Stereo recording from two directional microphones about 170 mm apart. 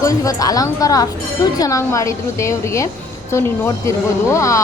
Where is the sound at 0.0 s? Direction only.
20° left (ahead or behind).